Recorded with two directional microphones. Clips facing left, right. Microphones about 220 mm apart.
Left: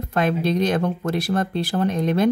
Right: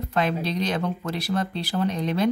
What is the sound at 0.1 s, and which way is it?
Speech, 50° left (ahead or behind).